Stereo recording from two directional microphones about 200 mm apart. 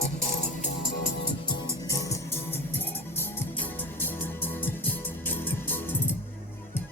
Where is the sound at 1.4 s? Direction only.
20° left (ahead or behind).